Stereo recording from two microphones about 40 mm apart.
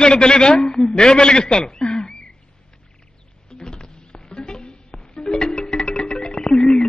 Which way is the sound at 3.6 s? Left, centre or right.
Centre.